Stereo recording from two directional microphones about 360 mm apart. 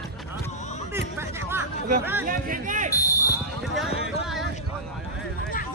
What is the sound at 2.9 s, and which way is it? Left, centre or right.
Fire alarm, centre.